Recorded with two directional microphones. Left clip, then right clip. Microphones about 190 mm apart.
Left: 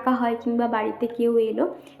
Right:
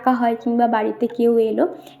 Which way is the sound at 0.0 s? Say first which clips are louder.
Right 5 dB; 25° right (ahead or behind).